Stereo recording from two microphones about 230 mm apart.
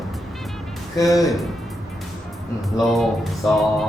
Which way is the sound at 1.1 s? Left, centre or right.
Centre.